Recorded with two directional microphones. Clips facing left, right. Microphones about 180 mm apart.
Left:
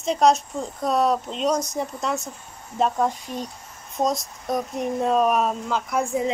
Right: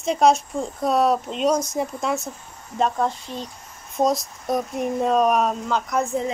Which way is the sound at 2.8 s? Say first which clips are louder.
Even; 10° left (ahead or behind).